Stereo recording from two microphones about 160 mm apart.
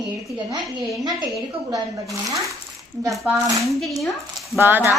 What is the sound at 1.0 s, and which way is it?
A woman's voice, 25° right (ahead or behind).